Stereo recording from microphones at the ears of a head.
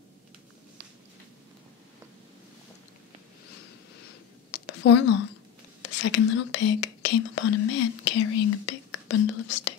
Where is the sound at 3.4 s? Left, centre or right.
Left.